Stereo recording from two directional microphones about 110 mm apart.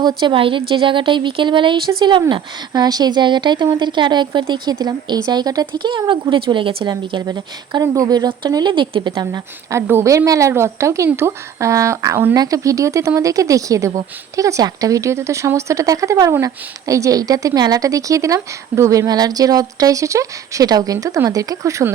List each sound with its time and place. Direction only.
0.0 s a woman's voice: 45° right (ahead or behind)
4.7 s a woman's voice: 35° right (ahead or behind)
9.2 s a woman's voice: 25° right (ahead or behind)